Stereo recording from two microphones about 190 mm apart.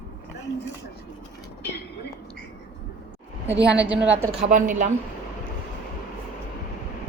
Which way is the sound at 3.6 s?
5° right (ahead or behind).